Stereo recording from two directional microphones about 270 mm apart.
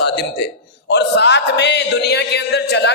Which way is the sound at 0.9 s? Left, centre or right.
Left.